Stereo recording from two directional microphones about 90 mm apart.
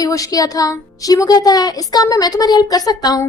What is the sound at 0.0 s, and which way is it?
A woman's voice, 40° left (ahead or behind).